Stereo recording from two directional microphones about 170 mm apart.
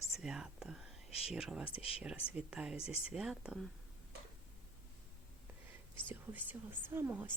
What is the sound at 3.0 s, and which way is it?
Speech, 5° right (ahead or behind).